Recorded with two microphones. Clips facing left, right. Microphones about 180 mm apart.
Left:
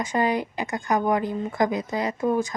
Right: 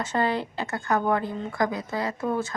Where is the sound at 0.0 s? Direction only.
15° left (ahead or behind).